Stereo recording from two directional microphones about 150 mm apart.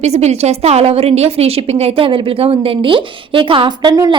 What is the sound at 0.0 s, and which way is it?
A woman's voice, 45° right (ahead or behind).